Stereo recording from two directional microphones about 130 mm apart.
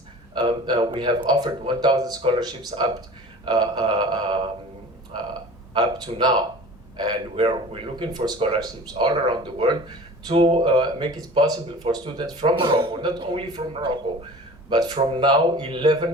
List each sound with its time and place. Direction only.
0.3 s speech: 35° right (ahead or behind)
5.7 s speech: 35° right (ahead or behind)